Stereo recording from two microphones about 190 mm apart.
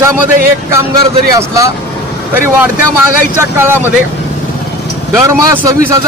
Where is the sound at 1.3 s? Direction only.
15° right (ahead or behind).